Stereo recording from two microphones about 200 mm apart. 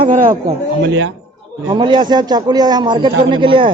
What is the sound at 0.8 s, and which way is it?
Speech, 75° right (ahead or behind).